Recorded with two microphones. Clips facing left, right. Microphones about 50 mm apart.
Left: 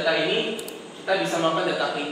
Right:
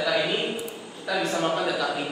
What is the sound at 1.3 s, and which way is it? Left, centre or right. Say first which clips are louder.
Speech: left 2 dB; left.